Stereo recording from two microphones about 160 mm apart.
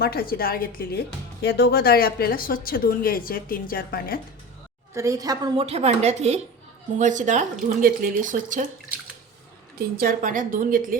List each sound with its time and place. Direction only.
0.0 s speech: 75° left (ahead or behind)
4.9 s a woman's voice: 20° right (ahead or behind)
5.5 s speech: 40° right (ahead or behind)
9.7 s a woman's voice: 70° right (ahead or behind)